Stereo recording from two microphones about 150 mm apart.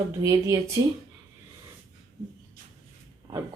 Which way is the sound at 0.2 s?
20° right (ahead or behind).